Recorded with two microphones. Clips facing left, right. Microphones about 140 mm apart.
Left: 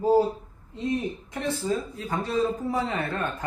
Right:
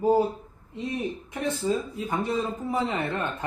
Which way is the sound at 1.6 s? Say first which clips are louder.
Right 1 dB; 20° right (ahead or behind).